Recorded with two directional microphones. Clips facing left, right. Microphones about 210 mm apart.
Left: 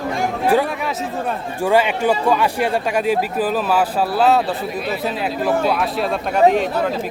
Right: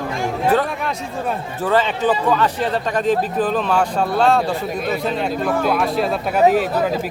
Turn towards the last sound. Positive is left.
turn(degrees=-5)  # may be behind; listen again after turning